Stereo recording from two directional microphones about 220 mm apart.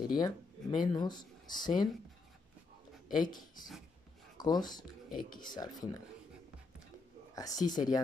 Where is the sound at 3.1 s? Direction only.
20° left (ahead or behind).